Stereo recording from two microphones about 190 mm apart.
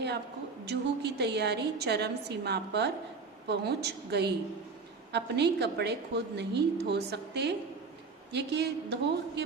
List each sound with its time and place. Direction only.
0.6 s a woman's voice: 60° right (ahead or behind)